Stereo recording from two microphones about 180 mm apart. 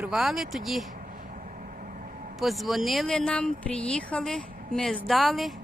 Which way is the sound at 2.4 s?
Centre (ahead or behind).